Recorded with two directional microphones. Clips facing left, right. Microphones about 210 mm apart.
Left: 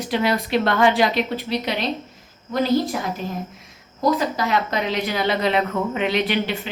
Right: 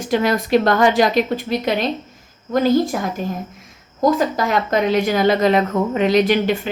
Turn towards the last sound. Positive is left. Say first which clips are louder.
# right 6 dB
turn(degrees=-45)  # may be behind; listen again after turning